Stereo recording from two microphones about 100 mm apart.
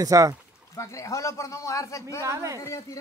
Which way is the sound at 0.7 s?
30° left (ahead or behind).